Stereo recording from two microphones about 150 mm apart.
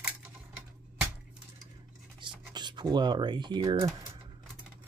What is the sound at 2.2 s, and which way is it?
Speech, 30° right (ahead or behind).